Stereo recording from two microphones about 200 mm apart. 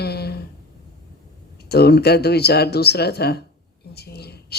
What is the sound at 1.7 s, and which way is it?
Speech, 55° left (ahead or behind).